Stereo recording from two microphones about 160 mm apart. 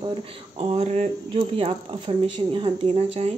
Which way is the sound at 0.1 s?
35° right (ahead or behind).